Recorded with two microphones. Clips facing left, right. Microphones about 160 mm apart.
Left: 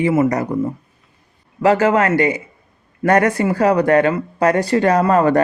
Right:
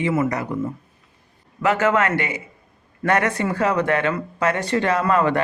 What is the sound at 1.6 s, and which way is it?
Speech, 35° left (ahead or behind).